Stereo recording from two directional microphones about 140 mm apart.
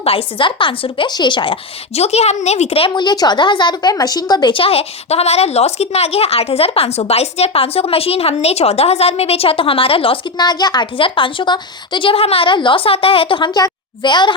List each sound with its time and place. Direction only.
0.0 s a woman's voice: 40° left (ahead or behind)
2.0 s a woman's voice: 50° left (ahead or behind); by 14.3 s 35° left (ahead or behind)